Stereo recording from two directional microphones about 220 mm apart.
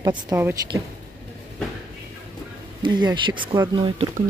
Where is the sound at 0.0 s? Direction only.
15° right (ahead or behind).